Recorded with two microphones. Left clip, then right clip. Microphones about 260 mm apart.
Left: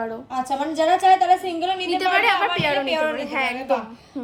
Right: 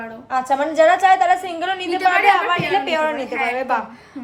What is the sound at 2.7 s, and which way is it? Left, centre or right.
A woman's voice, centre.